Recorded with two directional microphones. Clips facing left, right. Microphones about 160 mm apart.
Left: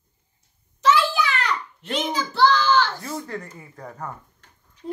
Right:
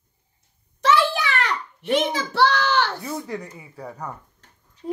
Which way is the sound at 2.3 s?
65° right (ahead or behind).